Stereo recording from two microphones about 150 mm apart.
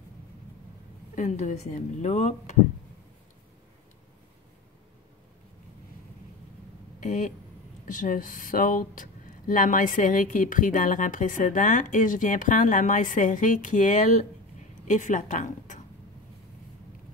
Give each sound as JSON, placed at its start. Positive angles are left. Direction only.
{"t": 1.1, "sound": "speech", "side_deg": 55}
{"t": 7.0, "sound": "speech", "side_deg": 55}